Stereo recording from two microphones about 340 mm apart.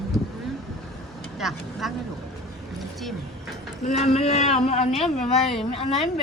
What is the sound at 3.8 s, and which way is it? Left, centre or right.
Speech, centre.